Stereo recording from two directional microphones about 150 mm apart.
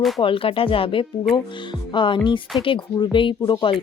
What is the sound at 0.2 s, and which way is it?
Speech, 35° left (ahead or behind).